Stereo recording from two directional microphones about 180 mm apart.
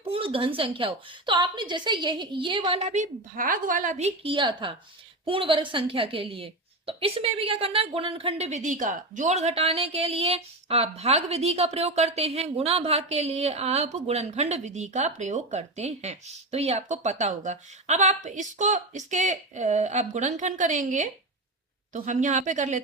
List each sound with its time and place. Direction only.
0.0 s a woman's voice: 30° right (ahead or behind)